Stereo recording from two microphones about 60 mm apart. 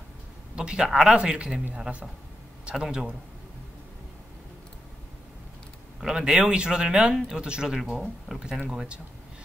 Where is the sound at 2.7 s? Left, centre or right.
Centre.